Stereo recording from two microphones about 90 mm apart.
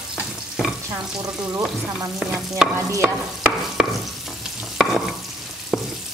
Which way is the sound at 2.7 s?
30° right (ahead or behind).